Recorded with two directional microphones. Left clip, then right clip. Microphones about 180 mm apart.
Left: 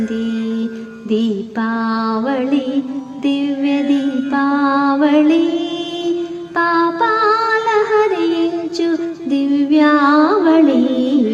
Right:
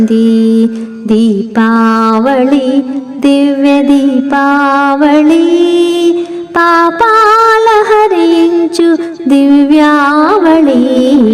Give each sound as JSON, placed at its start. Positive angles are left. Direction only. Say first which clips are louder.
{"t": 0.0, "sound": "music", "louder": "right 12 dB", "side_deg": 0}
{"t": 1.1, "sound": "music", "louder": "right 8 dB", "side_deg": -35}